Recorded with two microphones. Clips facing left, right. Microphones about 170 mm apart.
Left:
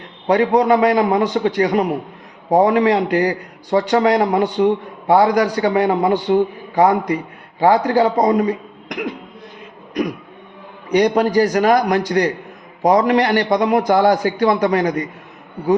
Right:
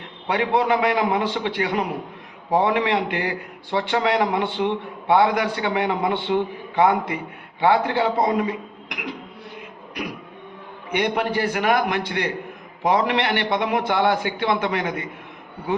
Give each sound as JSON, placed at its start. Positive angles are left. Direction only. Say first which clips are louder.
{"t": 0.3, "sound": "a man's voice", "louder": "left 7 dB", "side_deg": 40}
{"t": 10.9, "sound": "a man's voice", "louder": "left 8 dB", "side_deg": 40}